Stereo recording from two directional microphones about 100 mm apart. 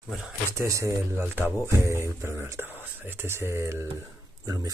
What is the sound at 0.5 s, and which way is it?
Speech, 30° right (ahead or behind).